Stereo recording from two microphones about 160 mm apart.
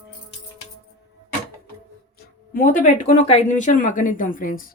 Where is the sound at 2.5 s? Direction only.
55° left (ahead or behind).